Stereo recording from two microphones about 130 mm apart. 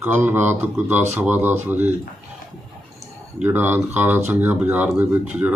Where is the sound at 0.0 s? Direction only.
15° right (ahead or behind).